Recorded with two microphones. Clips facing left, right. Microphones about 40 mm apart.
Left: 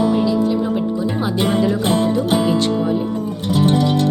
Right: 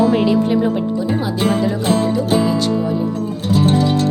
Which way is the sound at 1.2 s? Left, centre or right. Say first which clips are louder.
Even; left.